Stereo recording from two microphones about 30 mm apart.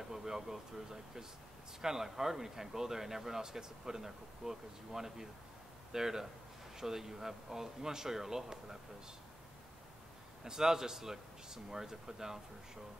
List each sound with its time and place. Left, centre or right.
0.1 s a sound: centre
1.8 s speech: centre
10.4 s speech: centre